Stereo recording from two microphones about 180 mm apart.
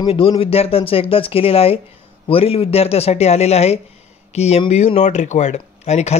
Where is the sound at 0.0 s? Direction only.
30° left (ahead or behind).